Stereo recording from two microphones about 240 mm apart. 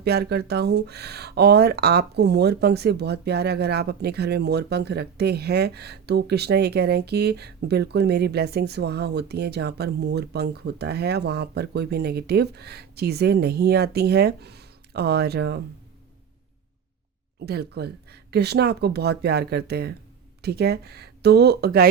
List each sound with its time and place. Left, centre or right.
0.0 s speech: right
17.4 s speech: right